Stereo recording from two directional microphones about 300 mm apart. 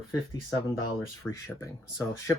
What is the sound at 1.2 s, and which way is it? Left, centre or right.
Speech, centre.